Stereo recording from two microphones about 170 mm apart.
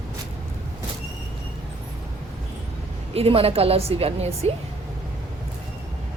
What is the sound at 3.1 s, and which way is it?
A woman's voice, 35° right (ahead or behind).